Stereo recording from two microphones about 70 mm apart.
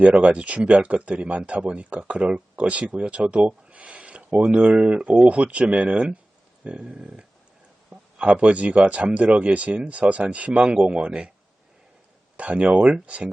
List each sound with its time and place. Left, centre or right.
0.0 s speech: centre
12.4 s speech: centre